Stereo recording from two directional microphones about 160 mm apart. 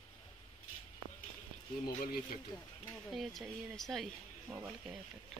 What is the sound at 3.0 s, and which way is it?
Speech, centre (ahead or behind).